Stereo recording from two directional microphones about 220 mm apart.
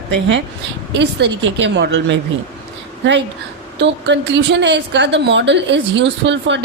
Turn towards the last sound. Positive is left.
turn(degrees=-55)  # may be behind; listen again after turning